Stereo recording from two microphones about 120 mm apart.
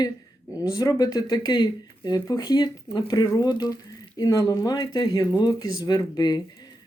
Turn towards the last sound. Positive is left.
turn(degrees=35)  # may be behind; listen again after turning